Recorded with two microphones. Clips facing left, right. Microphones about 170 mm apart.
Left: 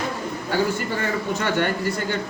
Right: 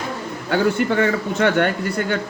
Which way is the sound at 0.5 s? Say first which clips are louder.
Right 6 dB; 60° right (ahead or behind).